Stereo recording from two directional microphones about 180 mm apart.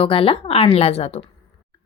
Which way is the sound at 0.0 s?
30° left (ahead or behind).